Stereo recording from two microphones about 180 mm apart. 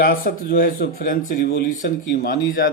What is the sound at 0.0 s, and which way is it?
Speech, 55° left (ahead or behind).